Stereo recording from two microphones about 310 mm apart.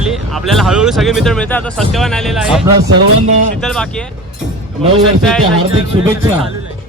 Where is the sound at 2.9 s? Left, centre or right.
Right.